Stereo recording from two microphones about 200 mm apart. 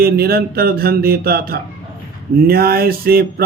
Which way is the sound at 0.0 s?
50° right (ahead or behind).